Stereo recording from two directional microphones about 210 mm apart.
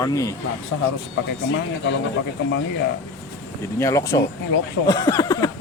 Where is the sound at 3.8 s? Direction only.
15° left (ahead or behind).